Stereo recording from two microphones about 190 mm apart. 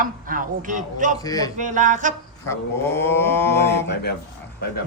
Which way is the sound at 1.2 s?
20° left (ahead or behind).